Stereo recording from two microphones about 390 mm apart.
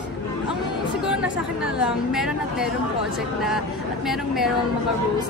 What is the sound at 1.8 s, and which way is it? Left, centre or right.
Speech, centre.